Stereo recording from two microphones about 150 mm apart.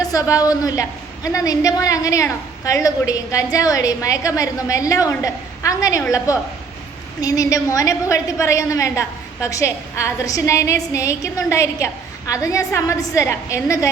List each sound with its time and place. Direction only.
0.0 s a woman's voice: 25° left (ahead or behind)